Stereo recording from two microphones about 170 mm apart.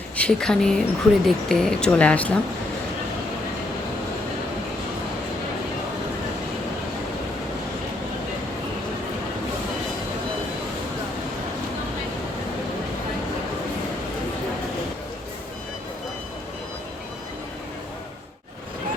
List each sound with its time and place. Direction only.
0.2 s speech: 5° left (ahead or behind)